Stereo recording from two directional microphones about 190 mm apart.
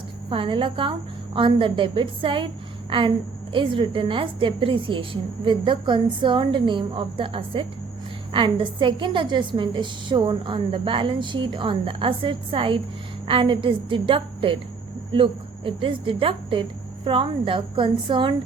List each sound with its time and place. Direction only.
0.3 s a woman's voice: 25° right (ahead or behind)